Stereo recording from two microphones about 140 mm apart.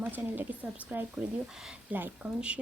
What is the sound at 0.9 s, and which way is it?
Speech, 10° right (ahead or behind).